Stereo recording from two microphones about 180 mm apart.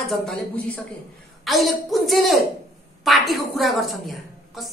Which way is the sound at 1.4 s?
Centre (ahead or behind).